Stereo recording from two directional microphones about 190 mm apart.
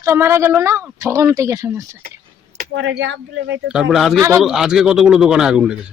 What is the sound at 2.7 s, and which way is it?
Speech, 75° right (ahead or behind).